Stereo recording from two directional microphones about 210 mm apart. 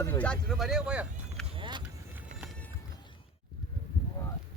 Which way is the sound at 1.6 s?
20° right (ahead or behind).